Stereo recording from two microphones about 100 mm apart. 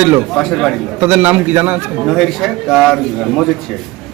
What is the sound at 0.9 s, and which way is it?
Speech, 20° right (ahead or behind).